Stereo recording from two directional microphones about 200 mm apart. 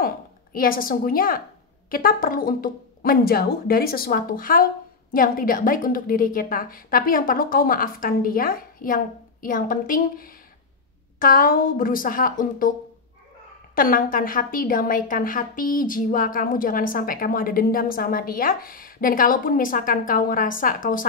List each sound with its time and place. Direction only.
0.6 s a woman's voice: 45° left (ahead or behind)
13.7 s a woman's voice: 45° left (ahead or behind)